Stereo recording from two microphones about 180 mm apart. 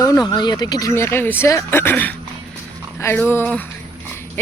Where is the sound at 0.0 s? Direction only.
20° left (ahead or behind).